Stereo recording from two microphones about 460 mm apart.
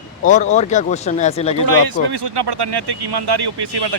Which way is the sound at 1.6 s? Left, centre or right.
Right.